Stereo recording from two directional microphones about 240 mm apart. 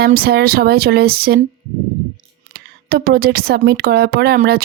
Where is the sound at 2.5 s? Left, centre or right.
Right.